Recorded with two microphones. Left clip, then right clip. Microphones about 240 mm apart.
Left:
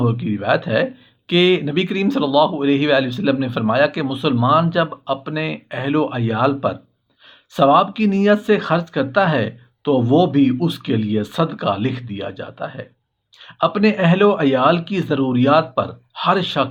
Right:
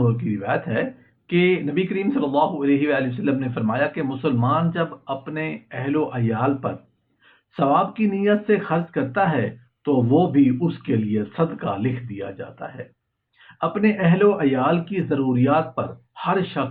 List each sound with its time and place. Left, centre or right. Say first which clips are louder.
0.0 s speech: left 3 dB; left